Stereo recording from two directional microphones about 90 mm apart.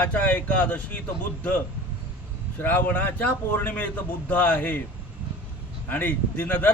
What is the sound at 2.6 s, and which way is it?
A man's voice, 20° left (ahead or behind).